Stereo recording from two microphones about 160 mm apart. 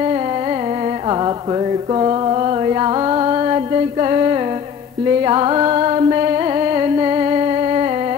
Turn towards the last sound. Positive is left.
turn(degrees=-35)  # may be behind; listen again after turning